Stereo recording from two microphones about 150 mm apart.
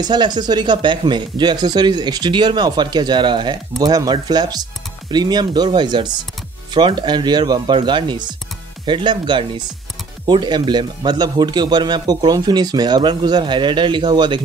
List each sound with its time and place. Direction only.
0.0 s speech: 30° right (ahead or behind)